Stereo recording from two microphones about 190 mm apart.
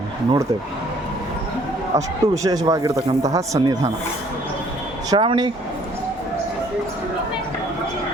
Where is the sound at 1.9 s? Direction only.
15° right (ahead or behind).